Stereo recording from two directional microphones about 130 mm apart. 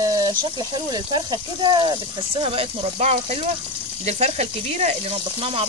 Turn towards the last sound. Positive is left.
turn(degrees=-50)  # may be behind; listen again after turning